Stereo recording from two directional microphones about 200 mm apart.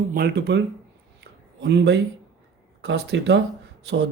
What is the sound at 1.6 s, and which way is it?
A man's voice, 55° right (ahead or behind).